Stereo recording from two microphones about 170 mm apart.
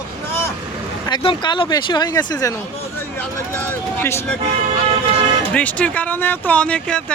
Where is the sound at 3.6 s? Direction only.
15° left (ahead or behind).